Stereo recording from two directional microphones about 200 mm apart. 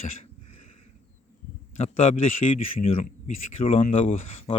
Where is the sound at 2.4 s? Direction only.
35° left (ahead or behind).